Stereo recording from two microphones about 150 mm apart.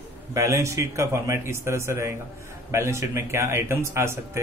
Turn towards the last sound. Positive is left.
turn(degrees=-15)  # may be behind; listen again after turning